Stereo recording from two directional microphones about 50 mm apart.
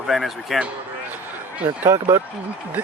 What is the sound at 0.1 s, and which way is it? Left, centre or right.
Speech, centre.